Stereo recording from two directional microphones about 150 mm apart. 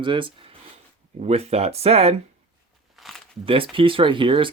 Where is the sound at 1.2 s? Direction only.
45° right (ahead or behind).